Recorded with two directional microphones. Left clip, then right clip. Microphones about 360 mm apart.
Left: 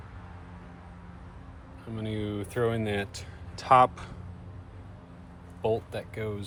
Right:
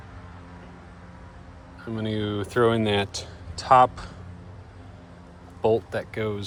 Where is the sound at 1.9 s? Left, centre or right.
Right.